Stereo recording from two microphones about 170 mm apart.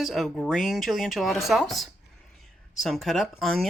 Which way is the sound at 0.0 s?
Centre (ahead or behind).